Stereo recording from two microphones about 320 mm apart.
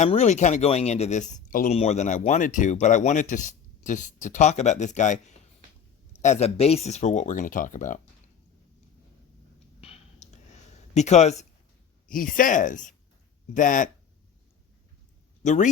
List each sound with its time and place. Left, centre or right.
0.0 s speech: left
6.2 s speech: centre
9.8 s clicking: centre
12.0 s speech: left
15.4 s speech: left